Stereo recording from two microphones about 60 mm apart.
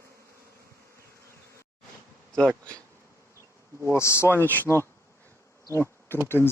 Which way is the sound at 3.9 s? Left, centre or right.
Left.